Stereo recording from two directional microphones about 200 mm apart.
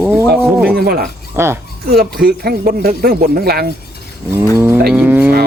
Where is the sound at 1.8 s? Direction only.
50° right (ahead or behind).